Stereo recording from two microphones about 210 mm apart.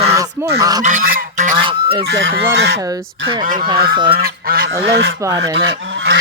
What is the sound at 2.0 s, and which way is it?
Fowl, 65° right (ahead or behind).